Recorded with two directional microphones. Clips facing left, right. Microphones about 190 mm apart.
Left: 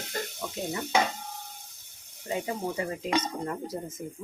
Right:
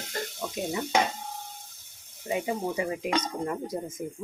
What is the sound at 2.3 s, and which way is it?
Speech, 15° right (ahead or behind).